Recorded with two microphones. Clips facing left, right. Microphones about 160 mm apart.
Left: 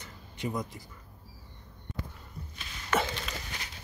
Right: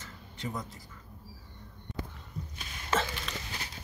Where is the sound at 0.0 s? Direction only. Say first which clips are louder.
Left 4 dB; 15° left (ahead or behind).